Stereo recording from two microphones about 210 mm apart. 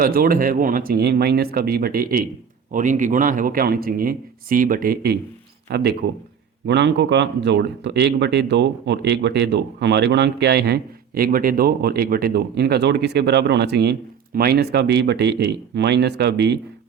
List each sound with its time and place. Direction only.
0.0 s a man's voice: 45° right (ahead or behind)